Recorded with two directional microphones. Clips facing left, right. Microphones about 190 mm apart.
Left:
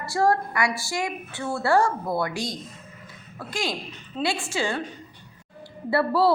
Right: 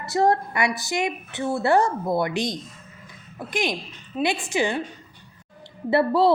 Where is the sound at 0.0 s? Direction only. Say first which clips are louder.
Right 2 dB; 20° right (ahead or behind).